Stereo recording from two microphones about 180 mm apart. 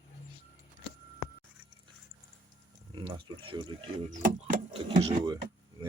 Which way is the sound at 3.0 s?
25° right (ahead or behind).